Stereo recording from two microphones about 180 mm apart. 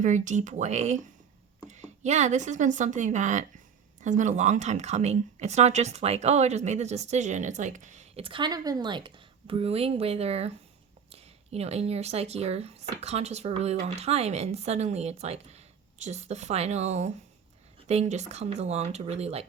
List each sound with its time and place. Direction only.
0.0 s speech: 40° right (ahead or behind)